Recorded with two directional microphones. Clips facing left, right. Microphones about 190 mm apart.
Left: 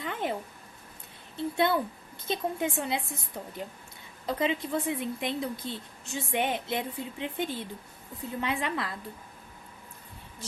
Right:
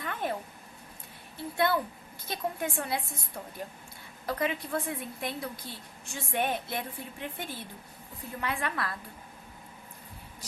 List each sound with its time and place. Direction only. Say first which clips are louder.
0.0 s a sound: left 1 dB; 15° left (ahead or behind)
1.4 s a woman's voice: left 2 dB; 20° left (ahead or behind)
4.3 s a woman's voice: left 2 dB; 20° left (ahead or behind)